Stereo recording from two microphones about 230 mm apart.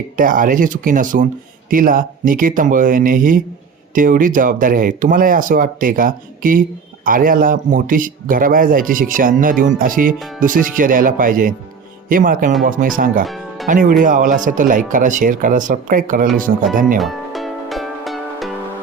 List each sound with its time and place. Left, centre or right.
0.2 s speech: right
13.2 s music: centre
13.7 s speech: right
17.0 s music: centre